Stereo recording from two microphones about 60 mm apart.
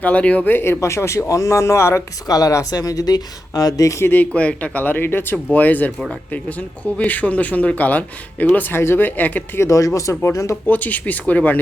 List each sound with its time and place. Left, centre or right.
0.0 s speech: left
0.8 s speech: left
2.2 s speech: left
4.0 s speech: left
4.4 s speech: left
9.6 s speech: left
10.7 s speech: left